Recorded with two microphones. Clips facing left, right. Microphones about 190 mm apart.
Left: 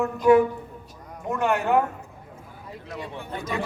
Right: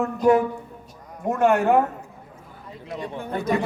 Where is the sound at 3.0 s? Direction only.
45° right (ahead or behind).